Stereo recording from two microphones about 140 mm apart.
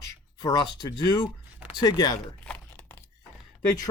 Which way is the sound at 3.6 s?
25° left (ahead or behind).